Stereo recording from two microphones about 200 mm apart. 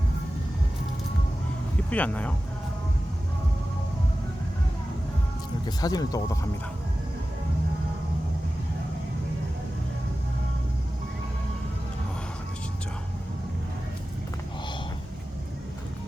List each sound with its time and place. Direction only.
1.9 s speech: 5° left (ahead or behind)
5.6 s speech: 20° left (ahead or behind)